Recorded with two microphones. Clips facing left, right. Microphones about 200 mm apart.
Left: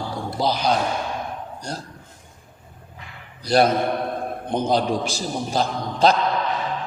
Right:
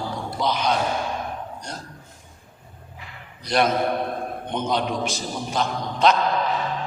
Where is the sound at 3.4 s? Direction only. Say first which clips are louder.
Left 3 dB; 35° left (ahead or behind).